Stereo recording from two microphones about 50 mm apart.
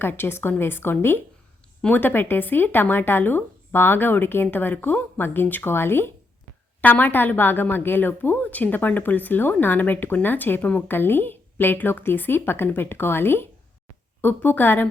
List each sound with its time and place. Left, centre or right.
0.0 s speech: left
5.7 s speech: left
6.8 s a woman's voice: left